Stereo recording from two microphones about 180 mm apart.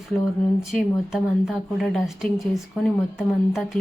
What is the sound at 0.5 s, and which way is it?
A woman's voice, centre (ahead or behind).